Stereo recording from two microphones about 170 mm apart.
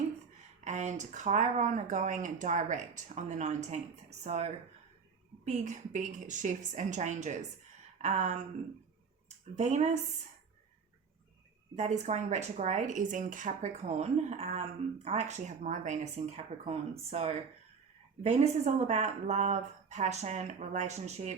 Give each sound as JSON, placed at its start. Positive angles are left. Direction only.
{"t": 0.6, "sound": "speech", "side_deg": -45}
{"t": 7.9, "sound": "a sound", "side_deg": -40}
{"t": 9.6, "sound": "speech", "side_deg": -40}
{"t": 11.8, "sound": "speech", "side_deg": -40}